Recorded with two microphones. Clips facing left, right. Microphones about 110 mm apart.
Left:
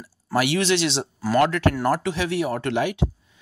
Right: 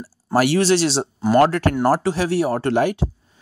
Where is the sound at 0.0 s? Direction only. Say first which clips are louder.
Right 5 dB; 40° right (ahead or behind).